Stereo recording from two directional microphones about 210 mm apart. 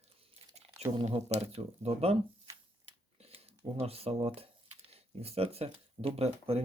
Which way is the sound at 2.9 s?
30° right (ahead or behind).